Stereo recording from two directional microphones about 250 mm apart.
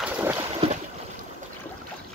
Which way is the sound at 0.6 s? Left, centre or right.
Right.